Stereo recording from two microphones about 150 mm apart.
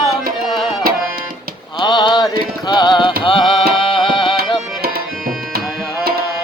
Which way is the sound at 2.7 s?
30° left (ahead or behind).